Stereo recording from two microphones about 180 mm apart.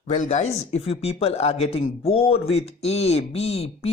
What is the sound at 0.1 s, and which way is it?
Speech, 40° left (ahead or behind).